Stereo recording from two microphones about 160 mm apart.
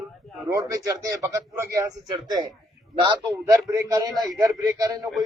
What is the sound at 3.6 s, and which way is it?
Speech, 20° right (ahead or behind).